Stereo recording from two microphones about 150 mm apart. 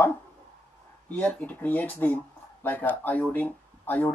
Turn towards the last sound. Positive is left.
turn(degrees=10)  # may be behind; listen again after turning